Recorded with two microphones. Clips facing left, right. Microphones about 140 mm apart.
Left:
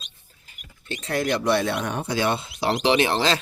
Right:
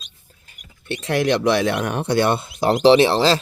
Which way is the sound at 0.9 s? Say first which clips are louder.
Right 5 dB; 85° right.